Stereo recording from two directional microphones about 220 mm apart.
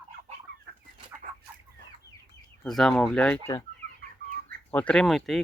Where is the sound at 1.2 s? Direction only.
35° right (ahead or behind).